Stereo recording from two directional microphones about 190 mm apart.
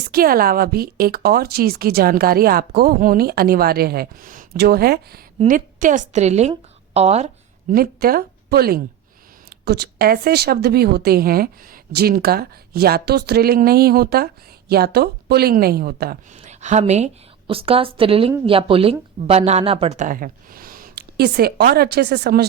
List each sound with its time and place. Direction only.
0.1 s a woman's voice: 50° right (ahead or behind); by 7.3 s 35° right (ahead or behind)
7.7 s a woman's voice: 50° right (ahead or behind)
16.4 s a woman's voice: 35° right (ahead or behind); by 22.4 s 55° right (ahead or behind)